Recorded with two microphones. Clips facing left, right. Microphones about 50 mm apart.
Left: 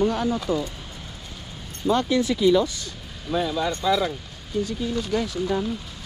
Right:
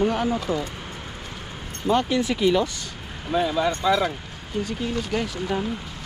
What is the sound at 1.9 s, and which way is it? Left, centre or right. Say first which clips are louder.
Speech: even; right.